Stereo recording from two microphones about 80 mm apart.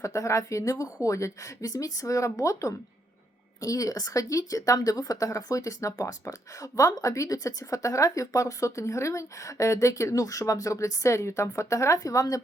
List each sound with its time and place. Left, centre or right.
0.0 s a woman's voice: left